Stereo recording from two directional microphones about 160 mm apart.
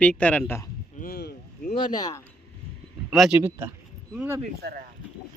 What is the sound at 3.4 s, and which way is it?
A man's voice, 15° right (ahead or behind).